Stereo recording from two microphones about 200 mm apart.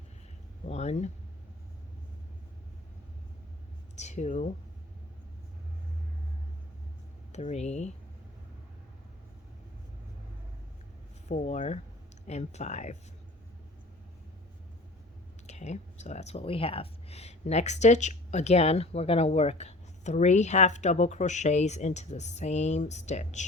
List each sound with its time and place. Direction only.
0.7 s a sound: 35° left (ahead or behind)
3.9 s speech: 35° left (ahead or behind)
7.3 s speech: 35° left (ahead or behind)
11.3 s speech: 35° left (ahead or behind)
15.4 s speech: 35° left (ahead or behind)